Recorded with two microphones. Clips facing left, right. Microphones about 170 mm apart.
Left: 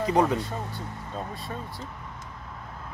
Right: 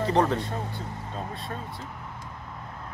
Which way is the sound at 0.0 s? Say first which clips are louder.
Even; 10° left (ahead or behind).